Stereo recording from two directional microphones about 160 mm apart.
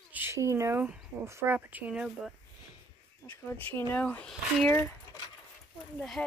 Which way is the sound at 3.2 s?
10° left (ahead or behind).